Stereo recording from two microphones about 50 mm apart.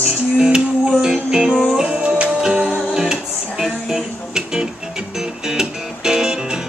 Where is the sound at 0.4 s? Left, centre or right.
Centre.